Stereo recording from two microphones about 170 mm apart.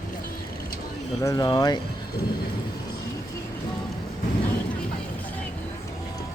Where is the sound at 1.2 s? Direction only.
20° left (ahead or behind).